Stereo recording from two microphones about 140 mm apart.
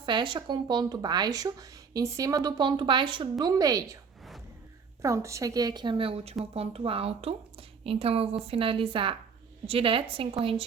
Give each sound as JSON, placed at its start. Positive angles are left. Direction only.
{"t": 0.0, "sound": "speech", "side_deg": -35}
{"t": 5.0, "sound": "a woman's voice", "side_deg": -20}